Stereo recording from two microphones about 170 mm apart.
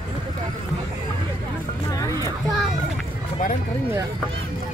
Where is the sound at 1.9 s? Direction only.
20° left (ahead or behind).